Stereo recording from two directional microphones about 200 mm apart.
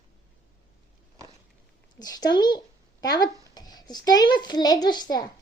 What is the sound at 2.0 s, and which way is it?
A child's voice, 20° left (ahead or behind).